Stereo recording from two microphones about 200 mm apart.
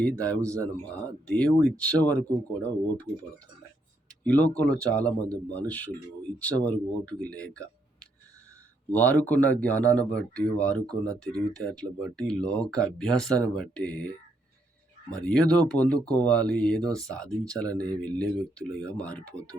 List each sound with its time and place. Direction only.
0.2 s speech: 5° left (ahead or behind)
4.2 s a man's voice: 5° left (ahead or behind)
8.9 s a man's voice: 10° left (ahead or behind)
15.1 s a man's voice: 5° left (ahead or behind)